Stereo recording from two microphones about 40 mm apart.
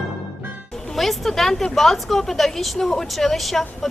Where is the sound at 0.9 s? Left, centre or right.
Centre.